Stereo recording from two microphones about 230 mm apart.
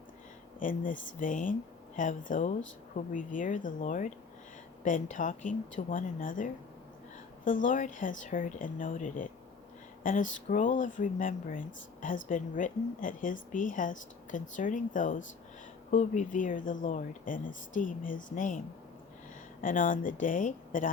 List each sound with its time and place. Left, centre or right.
0.6 s speech: left
19.6 s speech: left